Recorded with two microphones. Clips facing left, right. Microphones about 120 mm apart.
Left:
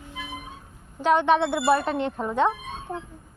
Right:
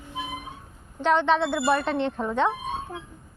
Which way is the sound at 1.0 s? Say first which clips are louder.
Left 1 dB; 10° left (ahead or behind).